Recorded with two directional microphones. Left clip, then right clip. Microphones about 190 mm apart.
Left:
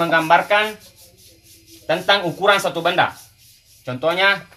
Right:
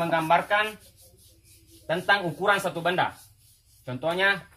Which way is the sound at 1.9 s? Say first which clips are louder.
Left 7 dB; 20° left (ahead or behind).